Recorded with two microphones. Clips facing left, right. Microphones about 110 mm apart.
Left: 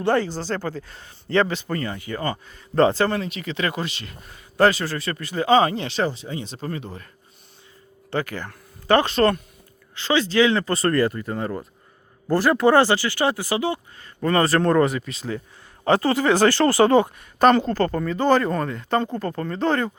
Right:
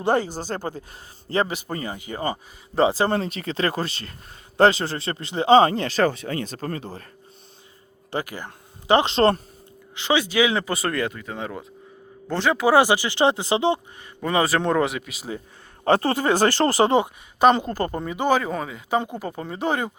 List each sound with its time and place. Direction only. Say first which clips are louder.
0.0 s speech: left 1 dB; 15° right (ahead or behind)
0.9 s speech: left 3 dB; 35° right (ahead or behind)
1.5 s speech: left 3 dB; 15° right (ahead or behind)
2.7 s speech: left 2 dB; 5° right (ahead or behind)
3.1 s speech: right 2 dB; 35° right (ahead or behind); by 6.5 s 60° right (ahead or behind)
6.5 s speech: even; 45° right (ahead or behind)
6.8 s speech: right 1 dB; 35° right (ahead or behind)
8.1 s speech: left 2 dB; 10° right (ahead or behind); by 9.4 s 25° right (ahead or behind)
9.9 s speech: left 1 dB; 15° right (ahead or behind)
14.2 s speech: left 2 dB; 10° right (ahead or behind)
15.9 s speech: left 1 dB; 45° right (ahead or behind)
16.4 s speech: left 2 dB; 20° right (ahead or behind)